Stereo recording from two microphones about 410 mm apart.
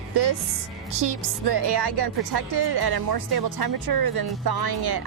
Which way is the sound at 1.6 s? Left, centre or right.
Right.